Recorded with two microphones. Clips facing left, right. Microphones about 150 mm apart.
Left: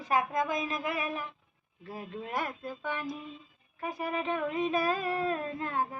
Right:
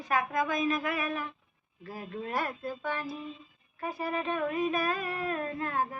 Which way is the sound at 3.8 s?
15° left (ahead or behind).